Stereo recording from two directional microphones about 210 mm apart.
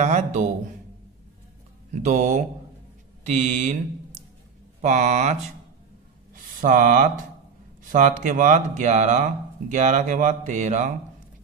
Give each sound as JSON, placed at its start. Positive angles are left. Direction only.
{"t": 0.0, "sound": "speech", "side_deg": -35}
{"t": 2.0, "sound": "speech", "side_deg": -35}
{"t": 6.6, "sound": "speech", "side_deg": -40}